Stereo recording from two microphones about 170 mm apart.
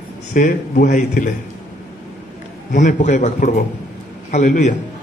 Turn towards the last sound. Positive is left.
turn(degrees=45)  # may be behind; listen again after turning